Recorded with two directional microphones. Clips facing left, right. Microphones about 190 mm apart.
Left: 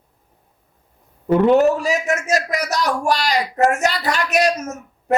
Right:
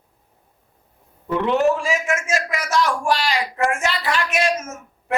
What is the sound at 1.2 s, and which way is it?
A man's voice, 45° left (ahead or behind).